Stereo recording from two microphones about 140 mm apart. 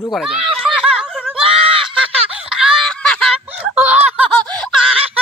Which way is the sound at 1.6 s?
40° right (ahead or behind).